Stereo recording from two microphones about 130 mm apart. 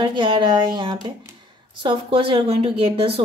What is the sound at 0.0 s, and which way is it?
A woman's voice, 40° right (ahead or behind).